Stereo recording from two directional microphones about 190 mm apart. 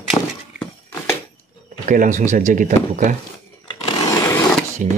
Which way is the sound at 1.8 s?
40° right (ahead or behind).